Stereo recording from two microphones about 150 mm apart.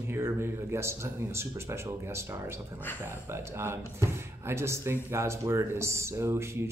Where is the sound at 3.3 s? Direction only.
15° right (ahead or behind).